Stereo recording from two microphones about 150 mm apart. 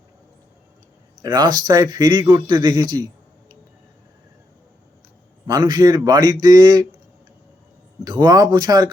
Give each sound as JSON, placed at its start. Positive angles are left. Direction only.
{"t": 1.2, "sound": "a man's voice", "side_deg": -25}
{"t": 5.5, "sound": "a man's voice", "side_deg": -25}
{"t": 8.0, "sound": "a man's voice", "side_deg": -25}